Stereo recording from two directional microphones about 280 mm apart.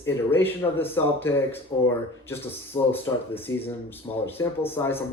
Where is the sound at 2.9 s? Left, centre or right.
Centre.